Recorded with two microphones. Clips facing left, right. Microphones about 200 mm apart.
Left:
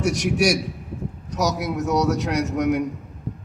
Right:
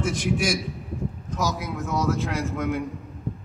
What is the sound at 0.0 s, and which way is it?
Speech, 75° left (ahead or behind).